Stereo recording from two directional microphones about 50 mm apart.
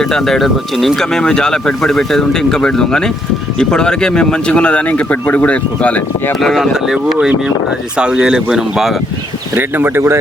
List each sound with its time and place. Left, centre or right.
0.0 s speech: centre; by 6.0 s left
6.4 s speech: centre
6.8 s speech: centre
7.2 s speech: right
9.6 s speech: right